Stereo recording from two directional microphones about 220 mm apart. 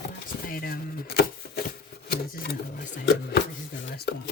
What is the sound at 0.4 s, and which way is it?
Chopping, 40° left (ahead or behind).